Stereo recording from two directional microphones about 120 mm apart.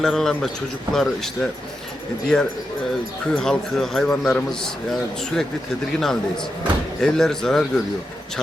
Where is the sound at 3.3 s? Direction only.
5° left (ahead or behind).